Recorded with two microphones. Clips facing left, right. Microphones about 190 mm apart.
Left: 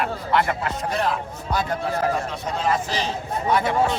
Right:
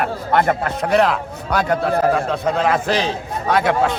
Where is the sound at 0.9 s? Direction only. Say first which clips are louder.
Right 9 dB; 75° right (ahead or behind).